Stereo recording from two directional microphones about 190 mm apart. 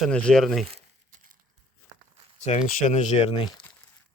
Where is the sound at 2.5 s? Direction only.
35° left (ahead or behind).